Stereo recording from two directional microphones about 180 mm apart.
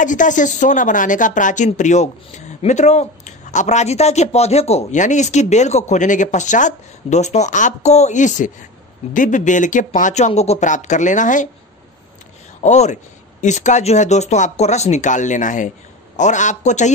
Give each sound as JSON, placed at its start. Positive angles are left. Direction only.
{"t": 0.0, "sound": "a woman's voice", "side_deg": 45}
{"t": 12.6, "sound": "a woman's voice", "side_deg": 40}